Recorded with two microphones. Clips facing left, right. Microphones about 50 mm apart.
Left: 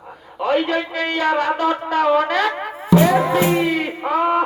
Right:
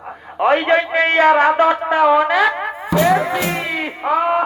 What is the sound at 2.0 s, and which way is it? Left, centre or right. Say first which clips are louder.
Speech: right 3 dB; centre.